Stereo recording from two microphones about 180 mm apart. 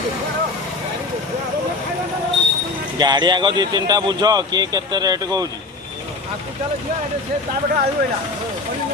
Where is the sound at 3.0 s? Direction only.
25° right (ahead or behind).